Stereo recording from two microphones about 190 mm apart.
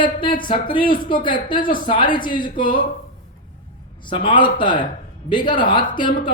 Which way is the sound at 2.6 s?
45° left (ahead or behind).